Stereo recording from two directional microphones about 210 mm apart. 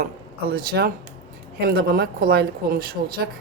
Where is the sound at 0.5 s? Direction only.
45° right (ahead or behind).